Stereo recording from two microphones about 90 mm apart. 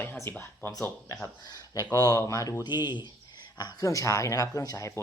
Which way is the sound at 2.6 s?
55° left (ahead or behind).